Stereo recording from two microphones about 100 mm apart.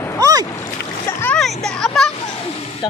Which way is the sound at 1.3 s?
5° left (ahead or behind).